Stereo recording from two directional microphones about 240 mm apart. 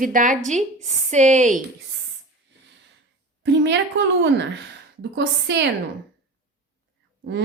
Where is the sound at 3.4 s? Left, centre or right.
Right.